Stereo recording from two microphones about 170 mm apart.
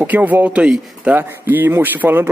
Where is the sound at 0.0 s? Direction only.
10° right (ahead or behind).